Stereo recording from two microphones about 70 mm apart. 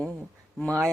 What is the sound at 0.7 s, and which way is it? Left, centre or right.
Speech, right.